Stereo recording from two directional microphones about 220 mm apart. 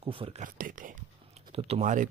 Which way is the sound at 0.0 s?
25° right (ahead or behind).